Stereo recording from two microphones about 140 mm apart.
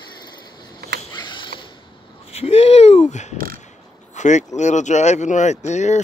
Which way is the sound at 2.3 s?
45° left (ahead or behind).